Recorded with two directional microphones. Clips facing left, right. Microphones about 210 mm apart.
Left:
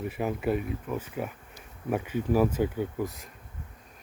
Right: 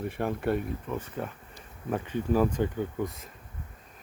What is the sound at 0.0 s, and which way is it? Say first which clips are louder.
Speech: even; 5° left (ahead or behind).